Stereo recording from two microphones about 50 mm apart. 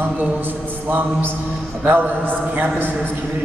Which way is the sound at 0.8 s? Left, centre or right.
Right.